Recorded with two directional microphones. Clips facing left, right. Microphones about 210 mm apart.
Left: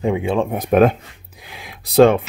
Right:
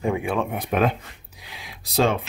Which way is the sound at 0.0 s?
20° left (ahead or behind).